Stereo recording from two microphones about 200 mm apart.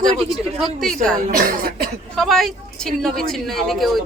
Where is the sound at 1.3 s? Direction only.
45° right (ahead or behind).